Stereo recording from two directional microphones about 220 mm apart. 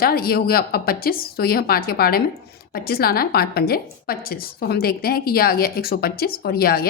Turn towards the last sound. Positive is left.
turn(degrees=45)  # may be behind; listen again after turning